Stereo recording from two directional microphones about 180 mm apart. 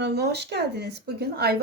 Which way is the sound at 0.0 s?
65° right (ahead or behind).